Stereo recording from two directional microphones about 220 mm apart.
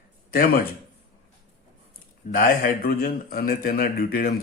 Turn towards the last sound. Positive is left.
turn(degrees=40)  # may be behind; listen again after turning